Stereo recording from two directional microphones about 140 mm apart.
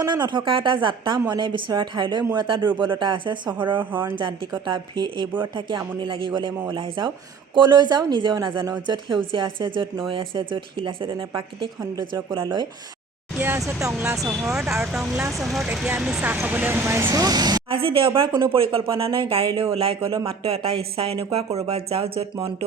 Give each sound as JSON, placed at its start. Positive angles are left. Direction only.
{"t": 0.0, "sound": "a woman's voice", "side_deg": -30}
{"t": 3.8, "sound": "speech", "side_deg": -15}
{"t": 4.6, "sound": "a woman's voice", "side_deg": -35}
{"t": 13.4, "sound": "speech", "side_deg": -15}
{"t": 14.1, "sound": "speech", "side_deg": -5}
{"t": 17.7, "sound": "a woman's voice", "side_deg": -40}